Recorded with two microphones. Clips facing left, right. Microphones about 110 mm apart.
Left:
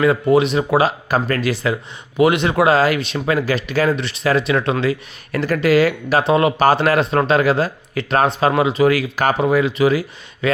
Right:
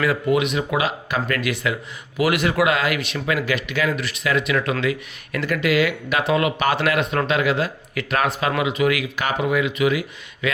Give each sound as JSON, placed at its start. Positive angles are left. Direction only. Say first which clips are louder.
{"t": 0.0, "sound": "speech", "louder": "left 5 dB", "side_deg": 30}